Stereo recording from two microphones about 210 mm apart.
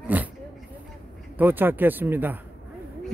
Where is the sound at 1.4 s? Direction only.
10° right (ahead or behind).